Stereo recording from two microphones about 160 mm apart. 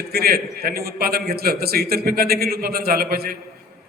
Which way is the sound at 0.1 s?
70° right (ahead or behind).